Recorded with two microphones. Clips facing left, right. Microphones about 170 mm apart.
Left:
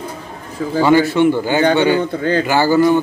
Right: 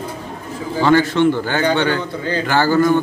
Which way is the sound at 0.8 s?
10° left (ahead or behind).